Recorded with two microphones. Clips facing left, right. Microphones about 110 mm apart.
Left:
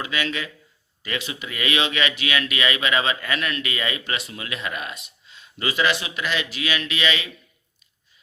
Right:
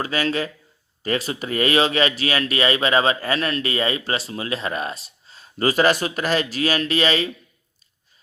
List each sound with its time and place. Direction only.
0.0 s speech: 40° right (ahead or behind)